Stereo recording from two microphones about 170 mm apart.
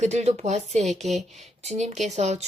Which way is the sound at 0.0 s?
40° right (ahead or behind).